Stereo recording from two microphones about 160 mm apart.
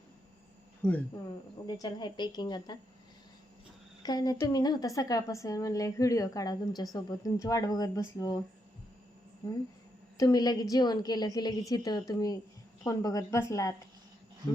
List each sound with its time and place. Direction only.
1.6 s a woman's voice: 25° left (ahead or behind)
4.0 s a woman's voice: 25° left (ahead or behind)
10.2 s a woman's voice: 25° left (ahead or behind)